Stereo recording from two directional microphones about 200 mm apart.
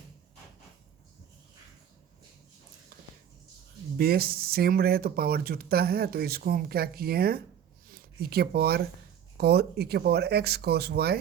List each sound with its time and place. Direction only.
3.9 s speech: 50° right (ahead or behind)